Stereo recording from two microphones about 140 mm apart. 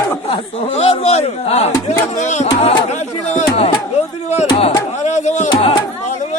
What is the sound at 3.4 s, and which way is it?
A man's voice, 50° left (ahead or behind).